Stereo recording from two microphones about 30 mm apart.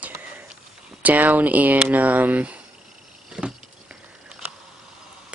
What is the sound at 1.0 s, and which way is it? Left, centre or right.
Speech, right.